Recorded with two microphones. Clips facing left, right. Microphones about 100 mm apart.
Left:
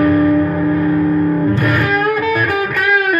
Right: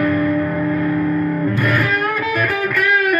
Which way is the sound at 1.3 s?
30° left (ahead or behind).